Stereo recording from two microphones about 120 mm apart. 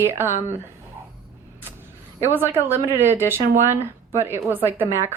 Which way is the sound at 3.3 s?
20° right (ahead or behind).